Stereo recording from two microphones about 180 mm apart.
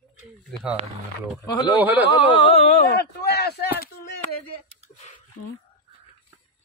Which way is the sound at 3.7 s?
65° left (ahead or behind).